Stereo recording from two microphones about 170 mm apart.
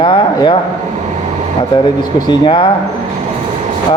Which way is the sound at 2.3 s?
30° left (ahead or behind).